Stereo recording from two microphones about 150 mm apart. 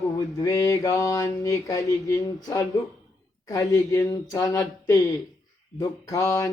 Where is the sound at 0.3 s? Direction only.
20° left (ahead or behind).